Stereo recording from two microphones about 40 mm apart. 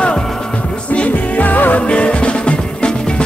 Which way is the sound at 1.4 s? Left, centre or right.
Left.